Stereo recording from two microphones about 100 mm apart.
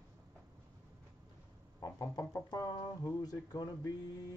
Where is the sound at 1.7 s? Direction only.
35° left (ahead or behind).